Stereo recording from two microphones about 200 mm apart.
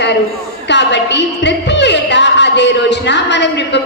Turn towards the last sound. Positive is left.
turn(degrees=60)  # may be behind; listen again after turning